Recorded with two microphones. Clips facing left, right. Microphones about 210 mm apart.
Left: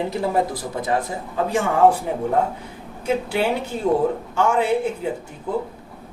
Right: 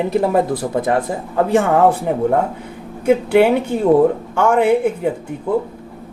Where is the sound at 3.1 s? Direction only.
55° right (ahead or behind).